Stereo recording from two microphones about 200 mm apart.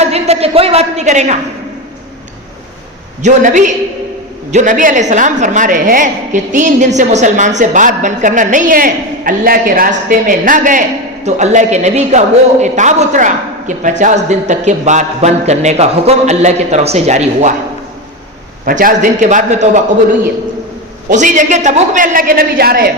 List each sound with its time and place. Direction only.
0.0 s a woman's voice: 30° right (ahead or behind)
3.2 s a woman's voice: 40° right (ahead or behind)
18.6 s a woman's voice: 40° right (ahead or behind)
21.1 s a woman's voice: 40° right (ahead or behind)